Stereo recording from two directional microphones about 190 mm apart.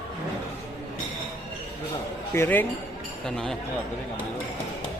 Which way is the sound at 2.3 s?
10° left (ahead or behind).